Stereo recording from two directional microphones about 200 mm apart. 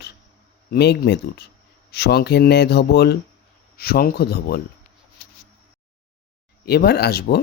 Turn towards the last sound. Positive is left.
turn(degrees=55)  # may be behind; listen again after turning